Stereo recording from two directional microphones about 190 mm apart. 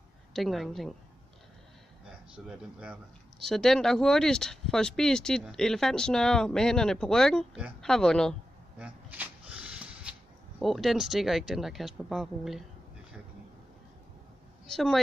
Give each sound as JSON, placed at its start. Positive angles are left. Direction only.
{"t": 0.3, "sound": "speech", "side_deg": 0}
{"t": 2.0, "sound": "speech", "side_deg": -5}
{"t": 8.8, "sound": "a sound", "side_deg": -5}
{"t": 10.6, "sound": "speech", "side_deg": 0}
{"t": 14.7, "sound": "speech", "side_deg": 0}